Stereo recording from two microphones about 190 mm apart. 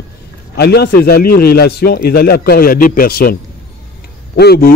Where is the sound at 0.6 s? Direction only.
60° left (ahead or behind).